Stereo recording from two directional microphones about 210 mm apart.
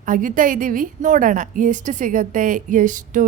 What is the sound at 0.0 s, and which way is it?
A woman's voice, 40° right (ahead or behind).